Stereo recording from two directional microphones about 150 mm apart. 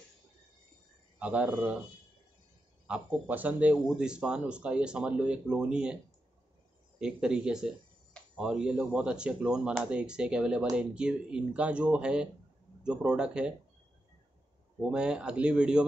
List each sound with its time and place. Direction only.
1.2 s speech: 10° right (ahead or behind)
2.9 s speech: 10° right (ahead or behind)
7.0 s speech: 5° right (ahead or behind)
14.9 s speech: 5° right (ahead or behind)